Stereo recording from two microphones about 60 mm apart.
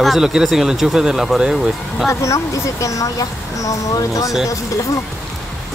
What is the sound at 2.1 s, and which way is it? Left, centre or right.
Speech, left.